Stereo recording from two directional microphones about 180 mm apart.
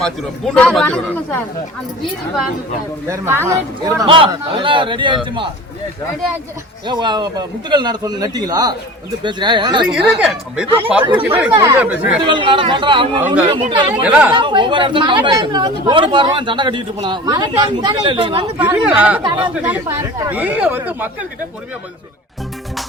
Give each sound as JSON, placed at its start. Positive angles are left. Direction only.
{"t": 0.0, "sound": "a man's voice", "side_deg": 5}
{"t": 3.1, "sound": "speech", "side_deg": -15}
{"t": 4.0, "sound": "a man's voice", "side_deg": -30}
{"t": 6.8, "sound": "a man's voice", "side_deg": -25}
{"t": 10.2, "sound": "speech", "side_deg": -5}
{"t": 12.2, "sound": "a man's voice", "side_deg": -25}
{"t": 14.0, "sound": "speech", "side_deg": -10}
{"t": 14.3, "sound": "a man's voice", "side_deg": -25}
{"t": 18.6, "sound": "speech", "side_deg": -5}